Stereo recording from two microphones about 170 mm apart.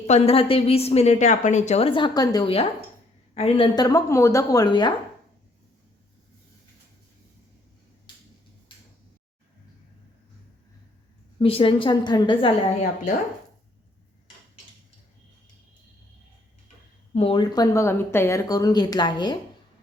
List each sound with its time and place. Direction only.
0.1 s a woman's voice: 35° left (ahead or behind)
11.3 s a woman's voice: 35° left (ahead or behind)
17.2 s speech: 30° left (ahead or behind)